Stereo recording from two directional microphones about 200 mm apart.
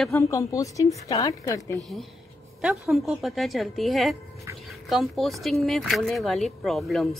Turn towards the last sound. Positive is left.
turn(degrees=0)  # may be behind; listen again after turning